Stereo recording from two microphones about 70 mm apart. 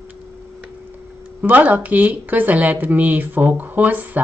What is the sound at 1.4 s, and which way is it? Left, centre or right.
Speech, right.